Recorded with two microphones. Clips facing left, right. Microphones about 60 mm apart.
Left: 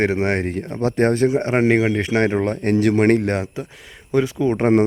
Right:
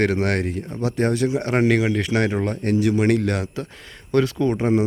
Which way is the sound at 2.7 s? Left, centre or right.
Left.